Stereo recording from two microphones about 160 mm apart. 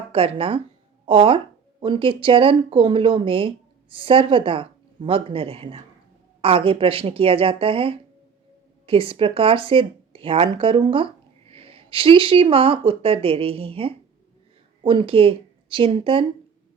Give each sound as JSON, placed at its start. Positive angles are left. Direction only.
{"t": 0.1, "sound": "speech", "side_deg": -35}